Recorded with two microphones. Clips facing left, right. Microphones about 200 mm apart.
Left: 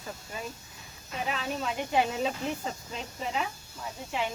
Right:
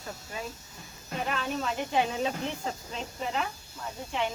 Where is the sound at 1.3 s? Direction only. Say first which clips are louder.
Even; 5° left (ahead or behind).